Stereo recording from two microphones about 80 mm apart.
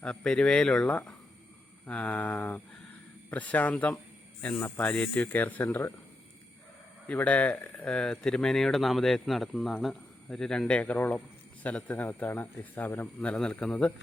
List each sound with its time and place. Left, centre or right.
0.0 s speech: centre
7.1 s speech: centre
7.9 s speech: centre